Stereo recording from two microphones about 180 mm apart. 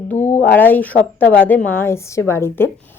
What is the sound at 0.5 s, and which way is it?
Speech, 10° left (ahead or behind).